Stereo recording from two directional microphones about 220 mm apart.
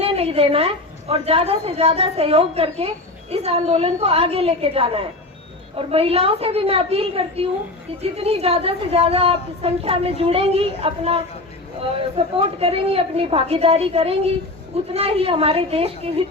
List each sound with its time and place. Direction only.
0.0 s a woman's voice: 25° right (ahead or behind)